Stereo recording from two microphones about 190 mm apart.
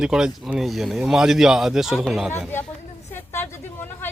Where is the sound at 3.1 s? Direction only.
10° left (ahead or behind).